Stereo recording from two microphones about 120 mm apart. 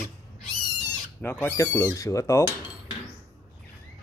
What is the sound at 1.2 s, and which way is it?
Speech, 15° left (ahead or behind).